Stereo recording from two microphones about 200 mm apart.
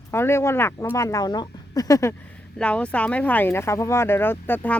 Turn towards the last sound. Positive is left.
turn(degrees=10)  # may be behind; listen again after turning